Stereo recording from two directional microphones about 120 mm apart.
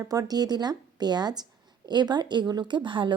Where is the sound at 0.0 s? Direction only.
30° right (ahead or behind).